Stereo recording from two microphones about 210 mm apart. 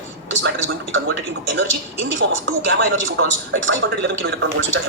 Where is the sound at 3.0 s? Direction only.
65° right (ahead or behind).